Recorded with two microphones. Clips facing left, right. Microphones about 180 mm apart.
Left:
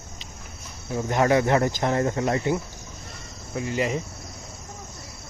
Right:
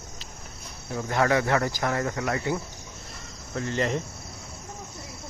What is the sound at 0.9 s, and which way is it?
Speech, 20° left (ahead or behind).